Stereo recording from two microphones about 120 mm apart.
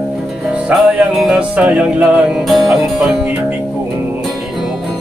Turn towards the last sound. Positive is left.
turn(degrees=-5)  # may be behind; listen again after turning